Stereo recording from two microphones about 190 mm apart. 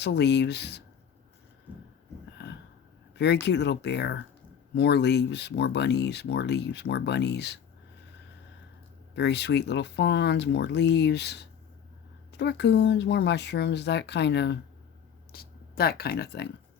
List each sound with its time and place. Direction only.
0.0 s speech: 60° left (ahead or behind)
3.4 s speech: 60° left (ahead or behind)
9.1 s speech: 65° left (ahead or behind)